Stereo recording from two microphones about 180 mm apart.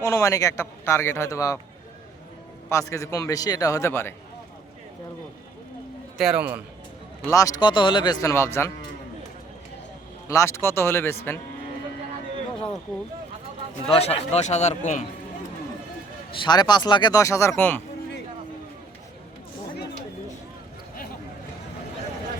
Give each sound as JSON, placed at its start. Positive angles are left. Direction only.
{"t": 0.0, "sound": "a man's voice", "side_deg": 15}
{"t": 2.6, "sound": "a man's voice", "side_deg": 15}
{"t": 6.1, "sound": "a man's voice", "side_deg": -5}
{"t": 7.3, "sound": "speech", "side_deg": 20}
{"t": 10.2, "sound": "a man's voice", "side_deg": 15}
{"t": 13.9, "sound": "a man's voice", "side_deg": 35}
{"t": 16.3, "sound": "speech", "side_deg": 25}